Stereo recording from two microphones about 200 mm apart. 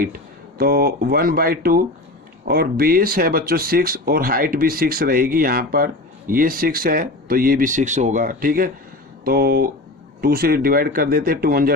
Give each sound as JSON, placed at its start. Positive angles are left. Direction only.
{"t": 0.6, "sound": "speech", "side_deg": -50}